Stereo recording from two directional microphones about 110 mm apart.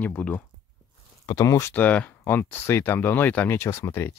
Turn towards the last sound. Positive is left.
turn(degrees=25)  # may be behind; listen again after turning